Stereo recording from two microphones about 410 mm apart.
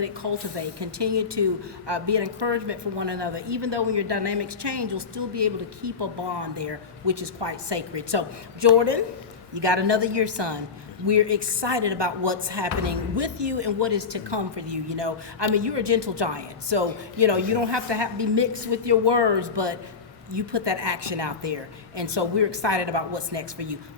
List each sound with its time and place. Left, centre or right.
0.0 s a woman's voice: right